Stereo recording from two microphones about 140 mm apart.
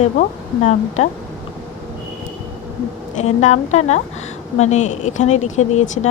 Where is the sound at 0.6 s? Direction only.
55° left (ahead or behind).